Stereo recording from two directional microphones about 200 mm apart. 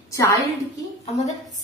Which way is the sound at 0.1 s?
15° left (ahead or behind).